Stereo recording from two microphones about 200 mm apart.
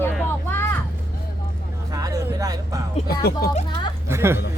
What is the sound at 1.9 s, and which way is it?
Music, 15° right (ahead or behind).